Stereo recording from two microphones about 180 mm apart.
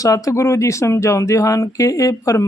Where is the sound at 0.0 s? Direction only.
20° left (ahead or behind).